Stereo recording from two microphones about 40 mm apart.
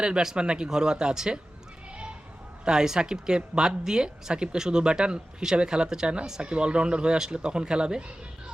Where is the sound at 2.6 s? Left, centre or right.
Centre.